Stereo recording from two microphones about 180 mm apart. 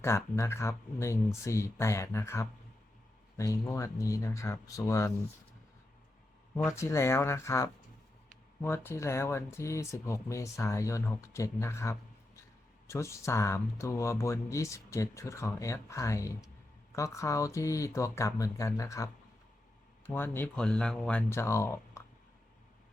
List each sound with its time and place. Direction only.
0.0 s speech: 15° left (ahead or behind)
6.7 s speech: 15° left (ahead or behind)